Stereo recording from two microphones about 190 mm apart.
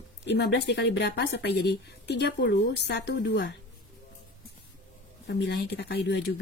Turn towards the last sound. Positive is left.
turn(degrees=60)  # may be behind; listen again after turning